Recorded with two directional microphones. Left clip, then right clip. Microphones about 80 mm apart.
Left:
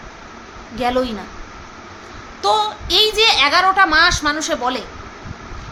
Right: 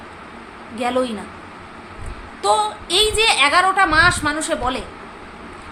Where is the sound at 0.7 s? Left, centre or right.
Left.